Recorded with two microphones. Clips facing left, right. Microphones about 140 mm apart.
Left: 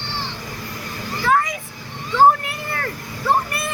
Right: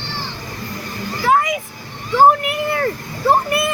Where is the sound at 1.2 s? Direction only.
20° right (ahead or behind).